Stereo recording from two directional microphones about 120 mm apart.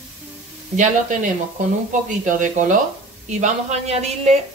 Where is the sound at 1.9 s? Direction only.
90° right.